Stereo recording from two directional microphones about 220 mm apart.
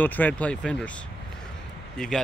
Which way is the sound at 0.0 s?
10° left (ahead or behind).